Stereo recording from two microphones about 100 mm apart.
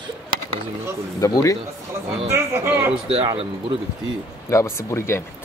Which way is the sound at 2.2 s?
25° right (ahead or behind).